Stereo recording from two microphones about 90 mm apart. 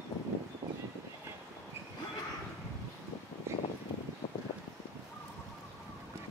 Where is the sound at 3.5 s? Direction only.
30° right (ahead or behind).